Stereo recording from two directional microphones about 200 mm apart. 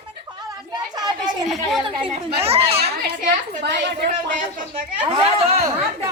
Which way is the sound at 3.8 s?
60° right (ahead or behind).